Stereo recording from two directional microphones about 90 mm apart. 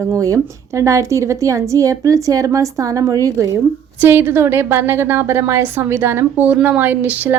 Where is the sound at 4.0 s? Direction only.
25° right (ahead or behind).